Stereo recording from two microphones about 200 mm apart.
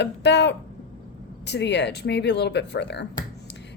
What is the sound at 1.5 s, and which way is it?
A woman's voice, 60° left (ahead or behind).